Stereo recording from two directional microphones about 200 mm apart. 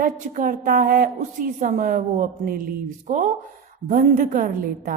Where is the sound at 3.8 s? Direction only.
40° right (ahead or behind).